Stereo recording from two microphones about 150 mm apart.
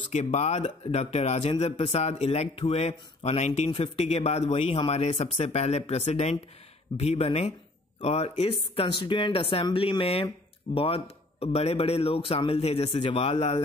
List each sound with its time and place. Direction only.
0.1 s speech: 50° left (ahead or behind)